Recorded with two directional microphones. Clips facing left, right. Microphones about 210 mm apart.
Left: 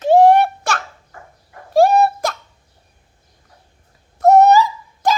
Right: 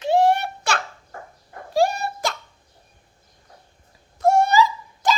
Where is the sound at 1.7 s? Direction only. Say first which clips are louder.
Left 8 dB; 55° left (ahead or behind).